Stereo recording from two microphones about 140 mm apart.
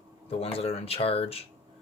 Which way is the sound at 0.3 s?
45° left (ahead or behind).